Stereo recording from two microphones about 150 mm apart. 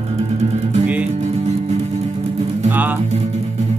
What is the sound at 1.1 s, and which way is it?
Music, 50° right (ahead or behind).